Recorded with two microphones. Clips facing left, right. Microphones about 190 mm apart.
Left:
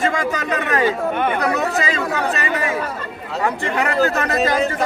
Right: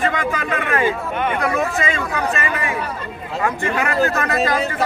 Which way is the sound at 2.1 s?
25° left (ahead or behind).